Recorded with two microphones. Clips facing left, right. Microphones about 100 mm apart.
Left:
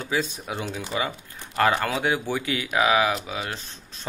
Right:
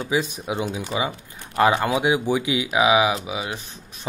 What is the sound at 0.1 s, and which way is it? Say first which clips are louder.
Speech: right 3 dB; 15° right (ahead or behind).